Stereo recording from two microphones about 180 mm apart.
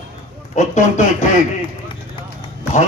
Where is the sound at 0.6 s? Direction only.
40° left (ahead or behind).